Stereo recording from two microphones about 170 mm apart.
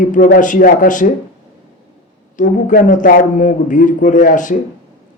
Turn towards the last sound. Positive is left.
turn(degrees=50)  # may be behind; listen again after turning